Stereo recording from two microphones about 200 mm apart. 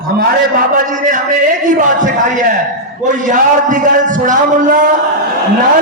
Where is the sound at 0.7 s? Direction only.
40° right (ahead or behind).